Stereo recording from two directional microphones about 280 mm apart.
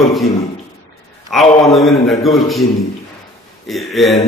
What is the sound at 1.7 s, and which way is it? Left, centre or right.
Speech, centre.